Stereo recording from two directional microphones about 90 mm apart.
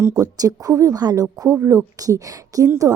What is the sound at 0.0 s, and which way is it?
Speech, 35° right (ahead or behind).